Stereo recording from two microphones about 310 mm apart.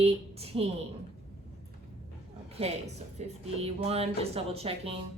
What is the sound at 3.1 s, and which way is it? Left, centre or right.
A woman's voice, centre.